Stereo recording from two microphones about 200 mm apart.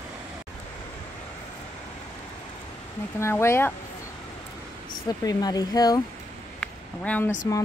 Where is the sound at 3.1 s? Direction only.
15° left (ahead or behind).